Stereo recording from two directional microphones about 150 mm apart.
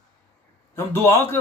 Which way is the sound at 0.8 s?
15° left (ahead or behind).